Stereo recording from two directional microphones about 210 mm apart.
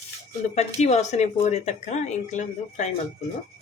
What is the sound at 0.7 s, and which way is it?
Speech, 35° left (ahead or behind).